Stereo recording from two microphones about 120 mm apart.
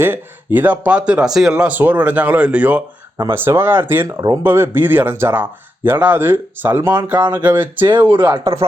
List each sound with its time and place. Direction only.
0.0 s speech: 15° right (ahead or behind)
4.0 s speech: 35° right (ahead or behind)
4.4 s speech: 20° right (ahead or behind)
7.9 s speech: 45° right (ahead or behind)